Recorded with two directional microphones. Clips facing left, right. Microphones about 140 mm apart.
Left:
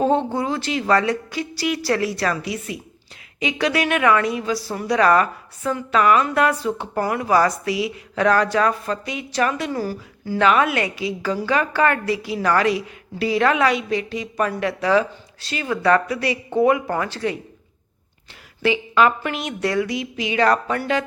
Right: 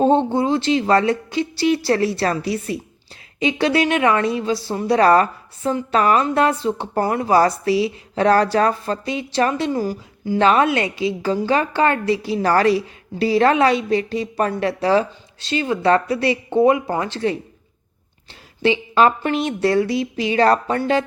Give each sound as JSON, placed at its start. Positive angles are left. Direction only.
{"t": 0.0, "sound": "a woman's voice", "side_deg": -30}
{"t": 10.4, "sound": "a woman's voice", "side_deg": -30}
{"t": 18.6, "sound": "a woman's voice", "side_deg": -30}